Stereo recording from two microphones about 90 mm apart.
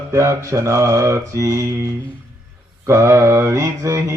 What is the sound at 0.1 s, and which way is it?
Mantra, 35° right (ahead or behind).